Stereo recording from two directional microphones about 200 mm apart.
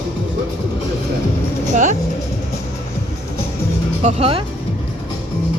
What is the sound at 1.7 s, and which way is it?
Vehicle, 40° right (ahead or behind).